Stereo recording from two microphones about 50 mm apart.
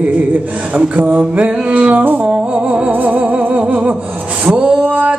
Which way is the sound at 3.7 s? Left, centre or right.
Right.